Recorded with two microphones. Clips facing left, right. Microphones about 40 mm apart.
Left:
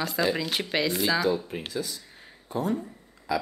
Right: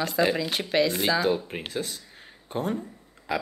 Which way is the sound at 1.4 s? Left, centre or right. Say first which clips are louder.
Even; right.